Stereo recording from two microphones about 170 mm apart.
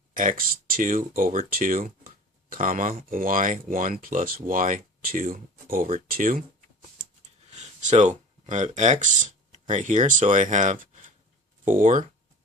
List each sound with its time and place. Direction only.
0.1 s speech: 50° right (ahead or behind)
7.0 s speech: 45° right (ahead or behind)